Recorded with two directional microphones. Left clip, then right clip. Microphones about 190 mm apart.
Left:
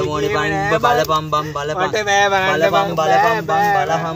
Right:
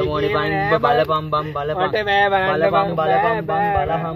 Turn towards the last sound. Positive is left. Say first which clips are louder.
# left 3 dB
turn(degrees=5)  # may be behind; listen again after turning